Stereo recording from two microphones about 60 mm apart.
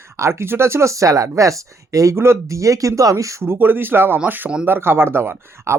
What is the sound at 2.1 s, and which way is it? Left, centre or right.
Speech, right.